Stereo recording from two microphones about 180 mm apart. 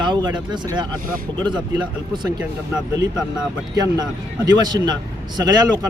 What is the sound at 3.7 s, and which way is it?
Speech, 20° right (ahead or behind).